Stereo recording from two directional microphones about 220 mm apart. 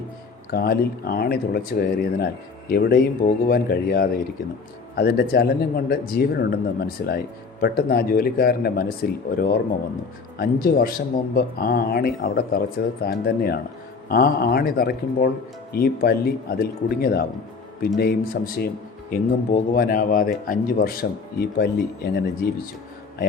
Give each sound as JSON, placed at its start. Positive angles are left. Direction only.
{"t": 0.5, "sound": "speech", "side_deg": 45}